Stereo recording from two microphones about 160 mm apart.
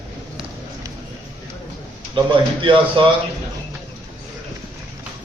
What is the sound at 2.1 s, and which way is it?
Speech, 30° right (ahead or behind).